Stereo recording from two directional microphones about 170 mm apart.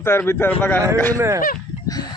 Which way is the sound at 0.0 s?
15° left (ahead or behind).